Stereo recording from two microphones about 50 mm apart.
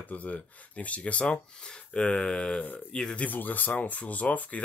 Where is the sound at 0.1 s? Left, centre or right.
Left; by 3.2 s centre.